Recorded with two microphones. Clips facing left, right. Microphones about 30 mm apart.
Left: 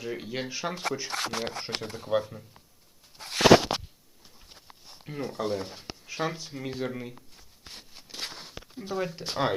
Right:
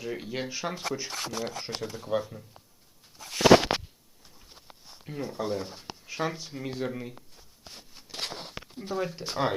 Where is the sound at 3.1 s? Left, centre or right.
Left.